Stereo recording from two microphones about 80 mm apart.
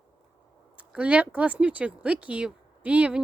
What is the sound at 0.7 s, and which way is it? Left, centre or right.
Speech, centre.